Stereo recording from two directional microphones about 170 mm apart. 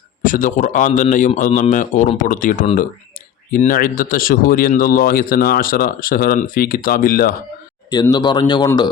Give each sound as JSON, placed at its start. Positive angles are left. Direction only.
{"t": 0.2, "sound": "a man's voice", "side_deg": 50}
{"t": 8.1, "sound": "speech", "side_deg": 25}